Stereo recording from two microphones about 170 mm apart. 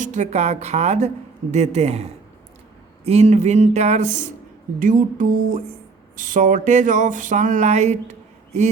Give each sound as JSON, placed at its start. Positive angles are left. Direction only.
{"t": 0.0, "sound": "speech", "side_deg": -45}